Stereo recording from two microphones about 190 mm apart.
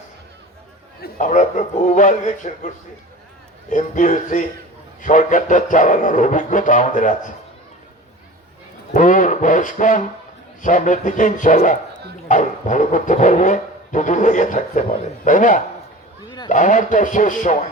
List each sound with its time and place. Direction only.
1.0 s speech: 40° left (ahead or behind)
3.7 s speech: 40° left (ahead or behind)
8.9 s speech: 40° left (ahead or behind)